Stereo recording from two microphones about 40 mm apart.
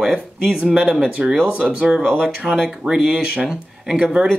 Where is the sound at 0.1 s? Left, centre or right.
Right.